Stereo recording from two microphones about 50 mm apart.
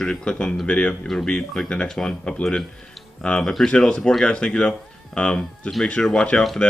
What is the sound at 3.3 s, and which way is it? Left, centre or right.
Speech, left.